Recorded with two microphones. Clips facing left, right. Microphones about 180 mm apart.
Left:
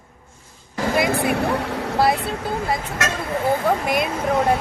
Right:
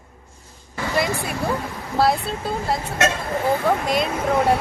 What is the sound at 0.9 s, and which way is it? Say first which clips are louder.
Speech: left 4 dB; 60° left (ahead or behind).